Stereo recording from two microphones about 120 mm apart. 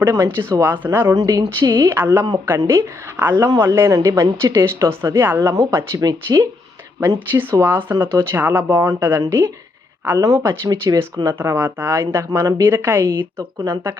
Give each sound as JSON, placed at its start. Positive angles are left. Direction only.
{"t": 0.0, "sound": "speech", "side_deg": -20}
{"t": 1.9, "sound": "a woman's voice", "side_deg": -20}
{"t": 7.0, "sound": "speech", "side_deg": -20}
{"t": 10.2, "sound": "speech", "side_deg": -30}
{"t": 11.3, "sound": "speech", "side_deg": -20}
{"t": 12.6, "sound": "a woman's voice", "side_deg": -15}